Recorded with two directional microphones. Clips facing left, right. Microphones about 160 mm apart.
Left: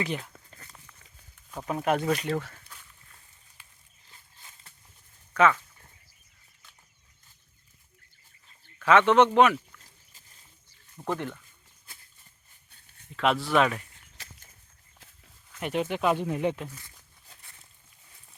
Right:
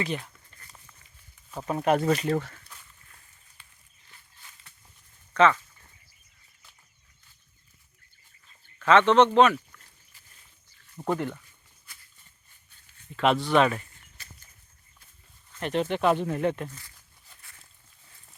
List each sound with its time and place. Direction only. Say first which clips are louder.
1.5 s speech: right 3 dB; 5° right (ahead or behind)
4.1 s a sound: even; 25° left (ahead or behind)
5.3 s speech: right 1 dB; 5° left (ahead or behind)
8.8 s speech: right 1 dB; 10° left (ahead or behind)
10.9 s speech: right 3 dB; 10° right (ahead or behind)
13.1 s speech: right 2 dB; centre (ahead or behind)
14.2 s a sound: left 2 dB; 90° left
15.6 s speech: right 2 dB; 10° left (ahead or behind)